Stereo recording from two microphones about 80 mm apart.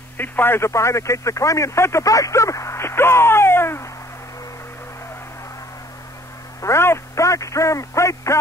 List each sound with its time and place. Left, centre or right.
0.2 s speech: left
6.6 s speech: left